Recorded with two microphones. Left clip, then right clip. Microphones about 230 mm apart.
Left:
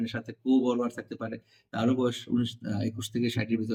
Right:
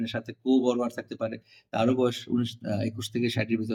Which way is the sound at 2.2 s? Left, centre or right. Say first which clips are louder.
Right 1 dB; centre.